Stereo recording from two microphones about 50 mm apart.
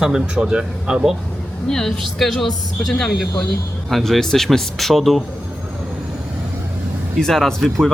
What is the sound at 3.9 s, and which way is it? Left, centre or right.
Speech, centre.